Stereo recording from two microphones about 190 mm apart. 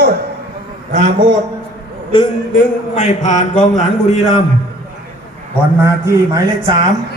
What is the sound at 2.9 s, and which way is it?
Mantra, 40° left (ahead or behind).